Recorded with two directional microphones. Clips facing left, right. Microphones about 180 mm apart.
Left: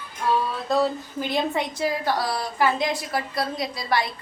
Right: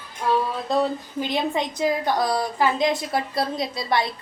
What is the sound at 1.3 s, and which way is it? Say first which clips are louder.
A woman's voice: even; 20° right (ahead or behind).